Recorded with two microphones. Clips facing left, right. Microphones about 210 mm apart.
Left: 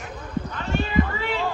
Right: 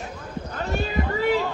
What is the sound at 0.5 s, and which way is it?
Cat, 40° right (ahead or behind).